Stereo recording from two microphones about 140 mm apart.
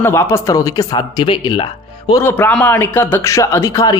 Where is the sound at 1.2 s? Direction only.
35° left (ahead or behind).